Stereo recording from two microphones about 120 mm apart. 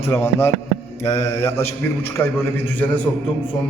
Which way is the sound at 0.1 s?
20° left (ahead or behind).